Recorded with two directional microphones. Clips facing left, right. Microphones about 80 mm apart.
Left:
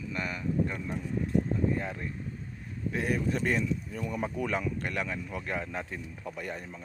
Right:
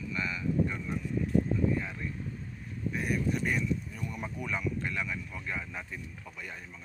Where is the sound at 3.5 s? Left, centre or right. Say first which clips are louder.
Left 2 dB; left.